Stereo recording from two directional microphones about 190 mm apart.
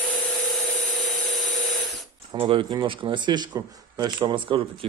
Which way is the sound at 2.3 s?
25° right (ahead or behind).